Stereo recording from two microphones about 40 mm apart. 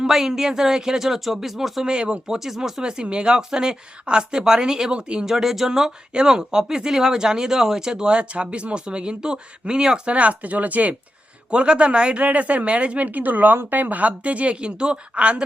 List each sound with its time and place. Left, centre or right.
0.1 s speech: centre
1.8 s speech: right
5.2 s speech: centre
10.1 s speech: right
11.5 s speech: right